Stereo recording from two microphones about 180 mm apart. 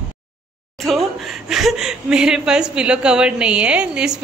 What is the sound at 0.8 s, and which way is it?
Speech, centre (ahead or behind).